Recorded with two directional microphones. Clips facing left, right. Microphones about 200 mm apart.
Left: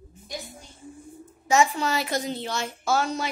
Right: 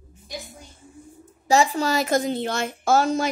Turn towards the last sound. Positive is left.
turn(degrees=-45)  # may be behind; listen again after turning